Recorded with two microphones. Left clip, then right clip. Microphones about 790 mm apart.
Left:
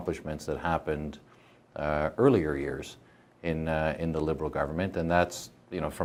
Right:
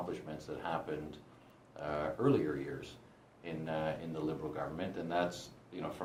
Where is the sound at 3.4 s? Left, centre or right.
Left.